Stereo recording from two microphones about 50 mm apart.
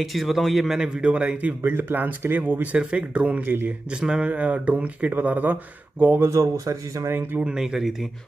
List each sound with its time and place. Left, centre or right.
0.0 s a man's voice: centre
0.7 s a man's voice: centre
1.7 s a man's voice: right; by 4.3 s centre
4.3 s speech: right
6.2 s speech: right
7.3 s a man's voice: right
7.6 s speech: centre